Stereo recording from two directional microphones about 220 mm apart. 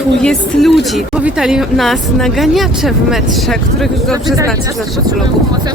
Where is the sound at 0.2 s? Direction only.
Centre (ahead or behind).